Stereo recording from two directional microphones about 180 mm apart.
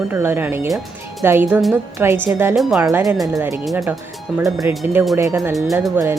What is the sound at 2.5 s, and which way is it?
Speech, centre (ahead or behind).